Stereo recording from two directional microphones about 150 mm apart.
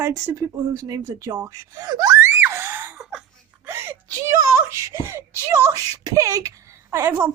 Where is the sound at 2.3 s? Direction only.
15° right (ahead or behind).